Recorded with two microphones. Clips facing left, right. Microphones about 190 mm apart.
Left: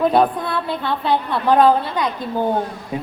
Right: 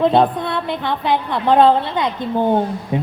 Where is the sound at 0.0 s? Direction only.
25° right (ahead or behind).